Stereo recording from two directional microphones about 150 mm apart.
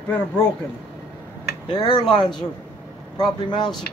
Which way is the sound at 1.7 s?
30° left (ahead or behind).